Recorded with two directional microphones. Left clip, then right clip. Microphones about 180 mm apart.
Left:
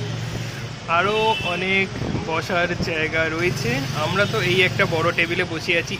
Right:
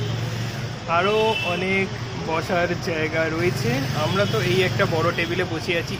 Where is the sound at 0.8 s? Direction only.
Centre (ahead or behind).